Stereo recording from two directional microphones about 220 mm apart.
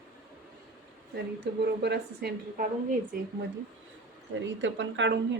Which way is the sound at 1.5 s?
50° right (ahead or behind).